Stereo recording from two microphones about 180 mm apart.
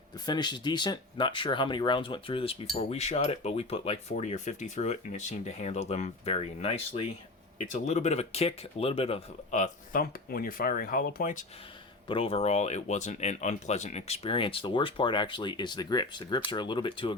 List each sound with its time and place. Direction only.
0.3 s speech: 25° left (ahead or behind); by 11.4 s 50° left (ahead or behind)
12.0 s speech: 30° left (ahead or behind)